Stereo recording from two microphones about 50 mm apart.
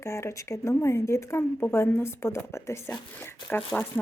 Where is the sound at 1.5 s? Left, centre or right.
Left.